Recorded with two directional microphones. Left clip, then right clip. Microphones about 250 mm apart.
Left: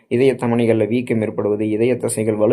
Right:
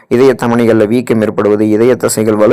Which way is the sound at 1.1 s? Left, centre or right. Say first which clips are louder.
Right 9 dB; right.